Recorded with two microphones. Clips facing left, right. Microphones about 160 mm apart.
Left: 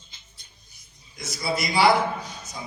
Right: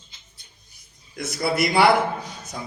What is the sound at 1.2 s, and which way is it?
Speech, 60° right (ahead or behind).